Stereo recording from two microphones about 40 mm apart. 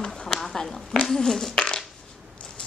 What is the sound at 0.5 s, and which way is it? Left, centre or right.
Speech, centre.